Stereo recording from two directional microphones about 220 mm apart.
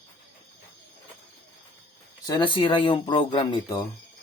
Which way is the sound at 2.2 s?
20° left (ahead or behind).